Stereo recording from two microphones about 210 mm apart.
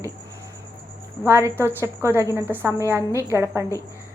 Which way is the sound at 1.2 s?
10° right (ahead or behind).